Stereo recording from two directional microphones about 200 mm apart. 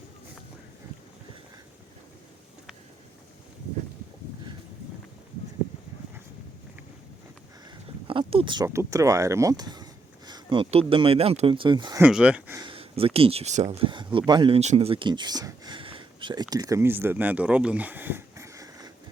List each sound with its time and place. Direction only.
8.0 s speech: 25° right (ahead or behind)
11.9 s speech: 5° right (ahead or behind)
12.5 s speech: 25° right (ahead or behind)